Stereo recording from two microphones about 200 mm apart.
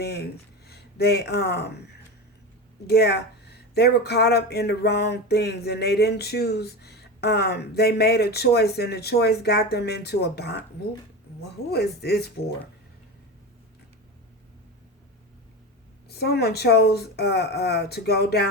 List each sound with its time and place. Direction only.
0.0 s speech: 55° left (ahead or behind)
2.8 s speech: 55° left (ahead or behind)
11.7 s speech: 55° left (ahead or behind)
16.0 s speech: 55° left (ahead or behind)